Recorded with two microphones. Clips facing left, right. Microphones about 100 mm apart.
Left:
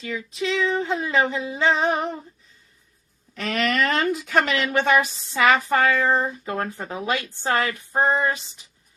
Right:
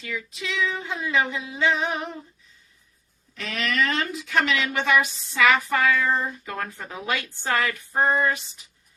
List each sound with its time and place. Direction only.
0.0 s speech: 30° left (ahead or behind)
3.3 s speech: 50° left (ahead or behind); by 8.6 s 25° left (ahead or behind)